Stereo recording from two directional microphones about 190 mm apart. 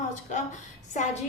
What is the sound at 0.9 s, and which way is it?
Speech, 40° left (ahead or behind).